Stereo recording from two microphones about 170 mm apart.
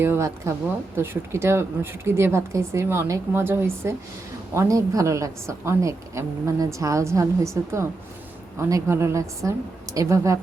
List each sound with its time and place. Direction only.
0.0 s a woman's voice: 15° right (ahead or behind)